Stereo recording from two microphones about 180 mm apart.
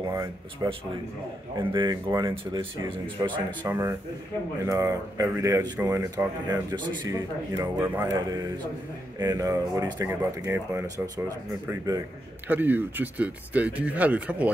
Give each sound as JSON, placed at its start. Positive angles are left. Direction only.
{"t": 0.0, "sound": "speech", "side_deg": -15}
{"t": 3.6, "sound": "speech", "side_deg": -15}